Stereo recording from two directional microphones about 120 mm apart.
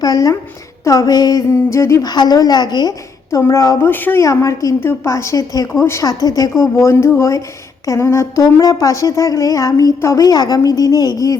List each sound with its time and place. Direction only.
0.0 s a woman's voice: 30° left (ahead or behind)